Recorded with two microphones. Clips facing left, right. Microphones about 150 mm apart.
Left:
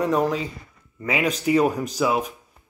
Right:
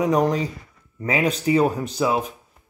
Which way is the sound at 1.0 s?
35° right (ahead or behind).